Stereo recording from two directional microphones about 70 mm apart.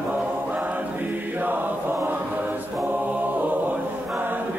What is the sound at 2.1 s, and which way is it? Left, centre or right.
Chant, right.